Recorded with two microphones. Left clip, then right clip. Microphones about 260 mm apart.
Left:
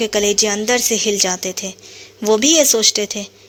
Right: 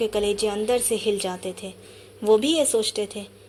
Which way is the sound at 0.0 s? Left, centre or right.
Left.